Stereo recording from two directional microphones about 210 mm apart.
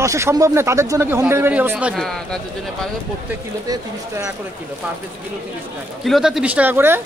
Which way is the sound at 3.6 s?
15° right (ahead or behind).